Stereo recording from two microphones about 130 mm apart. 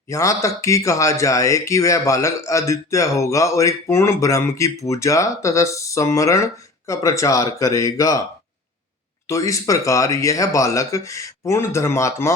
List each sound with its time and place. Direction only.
0.1 s speech: 25° left (ahead or behind)
9.2 s speech: 25° left (ahead or behind)